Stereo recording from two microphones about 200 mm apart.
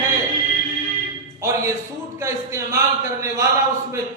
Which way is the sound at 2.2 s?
15° right (ahead or behind).